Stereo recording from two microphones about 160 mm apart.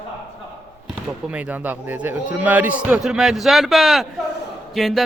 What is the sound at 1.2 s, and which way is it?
A man's voice, 10° right (ahead or behind).